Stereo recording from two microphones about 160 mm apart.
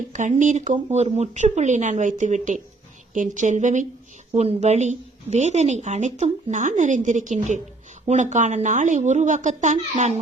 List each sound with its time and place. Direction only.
0.1 s a woman's voice: 50° right (ahead or behind)
4.3 s a woman's voice: 40° right (ahead or behind)